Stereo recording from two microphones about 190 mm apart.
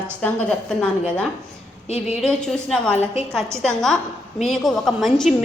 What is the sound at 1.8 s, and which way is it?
Speech, 35° left (ahead or behind).